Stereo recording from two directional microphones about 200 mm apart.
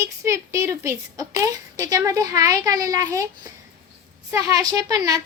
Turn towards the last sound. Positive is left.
turn(degrees=-20)  # may be behind; listen again after turning